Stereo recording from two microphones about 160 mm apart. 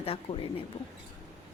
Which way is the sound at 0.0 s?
35° left (ahead or behind).